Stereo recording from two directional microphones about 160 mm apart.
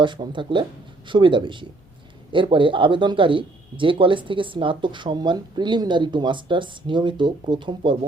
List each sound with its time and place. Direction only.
0.0 s speech: 30° right (ahead or behind)